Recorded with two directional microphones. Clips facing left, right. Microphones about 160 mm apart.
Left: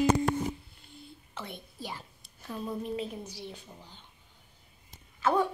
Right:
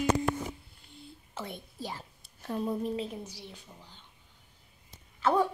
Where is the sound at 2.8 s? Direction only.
25° right (ahead or behind).